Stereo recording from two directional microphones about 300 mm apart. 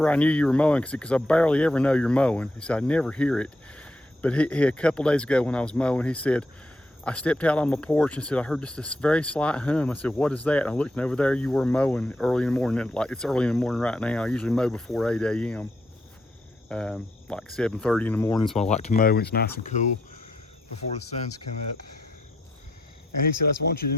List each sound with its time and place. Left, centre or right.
0.0 s speech: centre
16.6 s speech: centre
18.6 s speech: left
23.6 s speech: left